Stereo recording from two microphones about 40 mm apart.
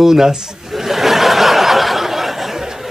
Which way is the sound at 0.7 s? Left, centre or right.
Centre.